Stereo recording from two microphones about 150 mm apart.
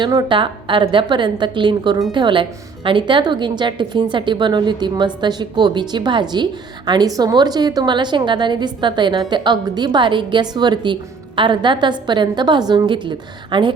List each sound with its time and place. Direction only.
0.0 s a woman's voice: 30° right (ahead or behind)